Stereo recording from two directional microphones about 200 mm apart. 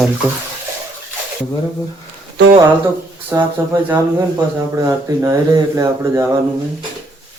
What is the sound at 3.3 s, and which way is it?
Speech, 15° right (ahead or behind).